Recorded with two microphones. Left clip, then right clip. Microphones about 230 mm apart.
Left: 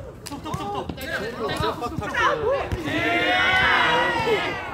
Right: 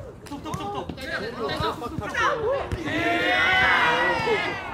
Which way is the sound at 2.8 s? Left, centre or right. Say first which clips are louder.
Left 1 dB; right.